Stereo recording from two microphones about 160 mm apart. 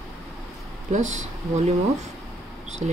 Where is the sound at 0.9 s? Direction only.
50° right (ahead or behind).